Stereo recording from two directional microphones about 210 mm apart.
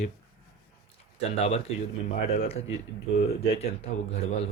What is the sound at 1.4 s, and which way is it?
Speech, 30° left (ahead or behind).